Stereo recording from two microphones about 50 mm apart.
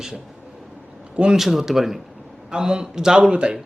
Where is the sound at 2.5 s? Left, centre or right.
Centre.